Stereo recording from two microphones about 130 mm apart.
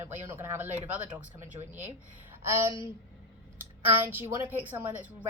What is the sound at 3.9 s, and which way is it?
A woman's voice, 15° right (ahead or behind).